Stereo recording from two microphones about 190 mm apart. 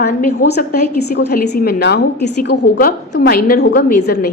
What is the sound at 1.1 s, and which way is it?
A woman's voice, 60° left (ahead or behind).